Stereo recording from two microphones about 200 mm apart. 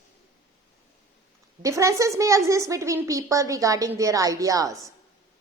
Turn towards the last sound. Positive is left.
turn(degrees=-15)  # may be behind; listen again after turning